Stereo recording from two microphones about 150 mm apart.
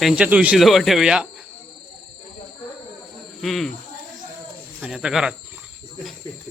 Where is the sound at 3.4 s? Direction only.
Centre (ahead or behind).